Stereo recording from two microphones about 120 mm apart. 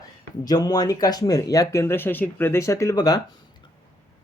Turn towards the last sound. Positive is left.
turn(degrees=35)  # may be behind; listen again after turning